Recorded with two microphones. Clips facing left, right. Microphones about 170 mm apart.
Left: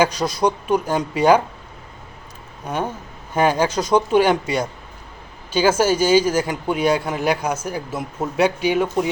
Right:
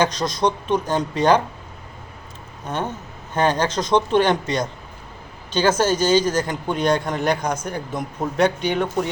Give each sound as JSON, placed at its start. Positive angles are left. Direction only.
{"t": 0.0, "sound": "speech", "side_deg": 10}
{"t": 2.6, "sound": "speech", "side_deg": 10}